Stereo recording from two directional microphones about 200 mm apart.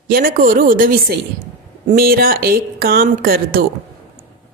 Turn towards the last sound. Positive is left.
turn(degrees=-45)  # may be behind; listen again after turning